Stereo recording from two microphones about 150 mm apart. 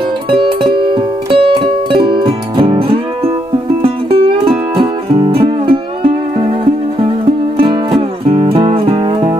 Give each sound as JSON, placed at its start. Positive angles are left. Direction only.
{"t": 0.3, "sound": "music", "side_deg": -35}